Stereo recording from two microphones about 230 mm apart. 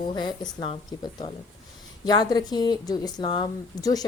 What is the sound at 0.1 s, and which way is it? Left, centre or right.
A woman's voice, centre.